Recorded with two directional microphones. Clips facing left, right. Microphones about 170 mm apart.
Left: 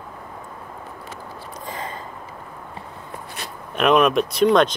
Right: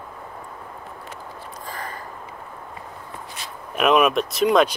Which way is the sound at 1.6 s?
20° left (ahead or behind).